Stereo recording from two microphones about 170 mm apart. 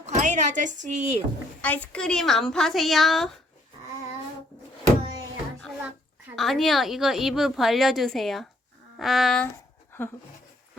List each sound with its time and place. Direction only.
0.0 s speech: 45° right (ahead or behind)
1.6 s a woman's voice: 10° left (ahead or behind)
6.3 s a woman's voice: centre (ahead or behind)